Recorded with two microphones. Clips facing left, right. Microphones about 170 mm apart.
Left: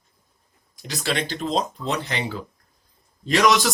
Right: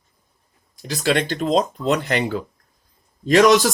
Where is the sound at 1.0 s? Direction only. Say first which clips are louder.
Right 6 dB; 45° right (ahead or behind).